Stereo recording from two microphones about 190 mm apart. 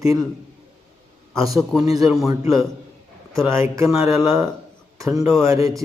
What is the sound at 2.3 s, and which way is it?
A man's voice, 15° right (ahead or behind).